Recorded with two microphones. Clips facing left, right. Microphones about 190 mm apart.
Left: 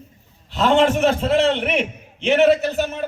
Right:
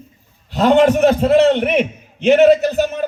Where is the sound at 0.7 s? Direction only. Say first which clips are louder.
Right 5 dB; 40° right (ahead or behind).